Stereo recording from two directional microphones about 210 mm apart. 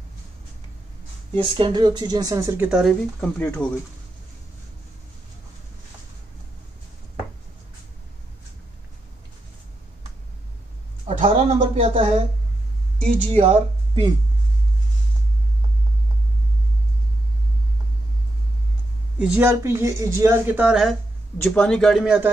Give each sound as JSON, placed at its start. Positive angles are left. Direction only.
{"t": 1.3, "sound": "speech", "side_deg": -20}
{"t": 11.1, "sound": "speech", "side_deg": -30}
{"t": 13.3, "sound": "speech", "side_deg": -30}
{"t": 19.1, "sound": "a man's voice", "side_deg": -5}